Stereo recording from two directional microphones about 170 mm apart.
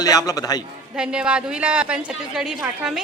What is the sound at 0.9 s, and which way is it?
A woman's voice, 5° right (ahead or behind).